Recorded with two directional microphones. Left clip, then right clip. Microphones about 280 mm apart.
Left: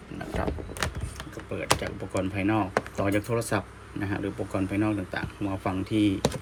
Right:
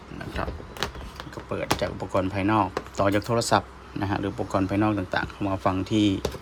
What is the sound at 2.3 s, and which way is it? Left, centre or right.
Speech, centre.